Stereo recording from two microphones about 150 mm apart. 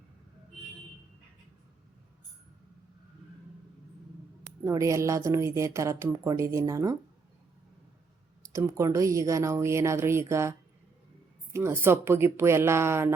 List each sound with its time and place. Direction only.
4.6 s a woman's voice: 20° right (ahead or behind)
8.5 s a woman's voice: 20° right (ahead or behind)
11.5 s speech: 15° right (ahead or behind)